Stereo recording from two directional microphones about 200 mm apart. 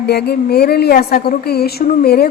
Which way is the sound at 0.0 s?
55° left (ahead or behind).